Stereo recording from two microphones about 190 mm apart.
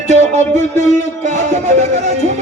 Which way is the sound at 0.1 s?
40° right (ahead or behind).